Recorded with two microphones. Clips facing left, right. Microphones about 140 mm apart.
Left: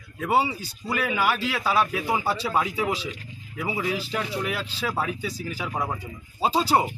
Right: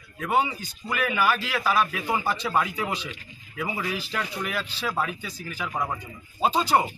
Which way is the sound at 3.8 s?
25° left (ahead or behind).